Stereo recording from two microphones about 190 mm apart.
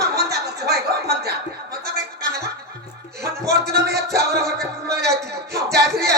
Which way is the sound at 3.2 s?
15° right (ahead or behind).